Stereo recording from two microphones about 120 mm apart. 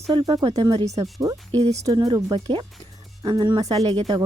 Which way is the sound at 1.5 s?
60° right (ahead or behind).